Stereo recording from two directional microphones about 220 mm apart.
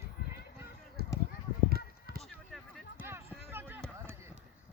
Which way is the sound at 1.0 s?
45° right (ahead or behind).